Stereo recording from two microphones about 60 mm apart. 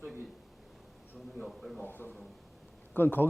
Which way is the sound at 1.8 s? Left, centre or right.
Left.